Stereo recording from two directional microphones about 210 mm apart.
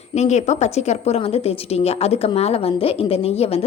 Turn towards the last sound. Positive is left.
turn(degrees=30)  # may be behind; listen again after turning